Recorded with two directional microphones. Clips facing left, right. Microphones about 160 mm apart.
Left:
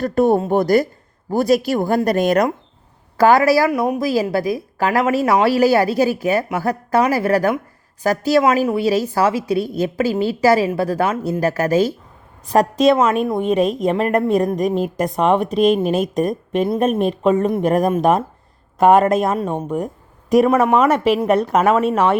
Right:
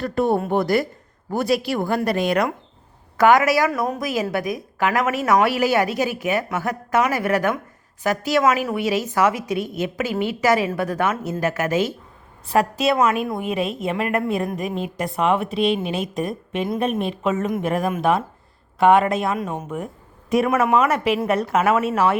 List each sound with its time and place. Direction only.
0.0 s a woman's voice: 45° left (ahead or behind)
3.7 s speech: 20° left (ahead or behind)
4.1 s a woman's voice: 30° left (ahead or behind)
12.7 s a woman's voice: 10° right (ahead or behind)
13.5 s a woman's voice: 40° left (ahead or behind)